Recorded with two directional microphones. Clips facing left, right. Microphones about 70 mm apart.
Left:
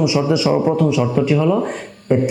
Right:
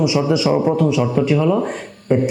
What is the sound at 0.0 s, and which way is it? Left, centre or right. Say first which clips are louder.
A man's voice: even; centre.